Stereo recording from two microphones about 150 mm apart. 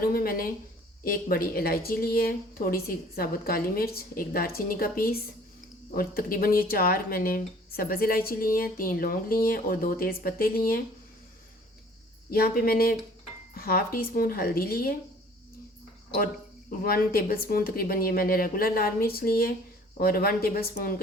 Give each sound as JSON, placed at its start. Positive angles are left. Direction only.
{"t": 0.0, "sound": "speech", "side_deg": 80}
{"t": 12.3, "sound": "speech", "side_deg": 90}
{"t": 16.1, "sound": "speech", "side_deg": 75}